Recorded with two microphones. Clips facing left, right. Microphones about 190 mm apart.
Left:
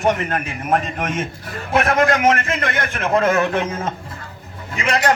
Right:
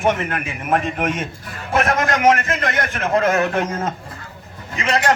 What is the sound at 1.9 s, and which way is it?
A man's voice, 55° left (ahead or behind).